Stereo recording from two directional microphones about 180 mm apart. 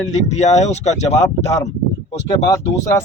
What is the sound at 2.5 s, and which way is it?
Speech, 15° left (ahead or behind).